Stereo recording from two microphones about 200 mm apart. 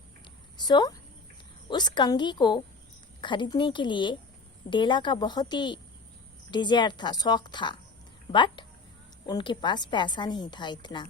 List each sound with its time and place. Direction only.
0.5 s a woman's voice: 20° left (ahead or behind)